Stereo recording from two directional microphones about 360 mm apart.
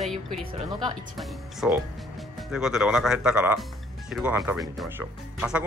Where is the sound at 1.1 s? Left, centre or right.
Centre.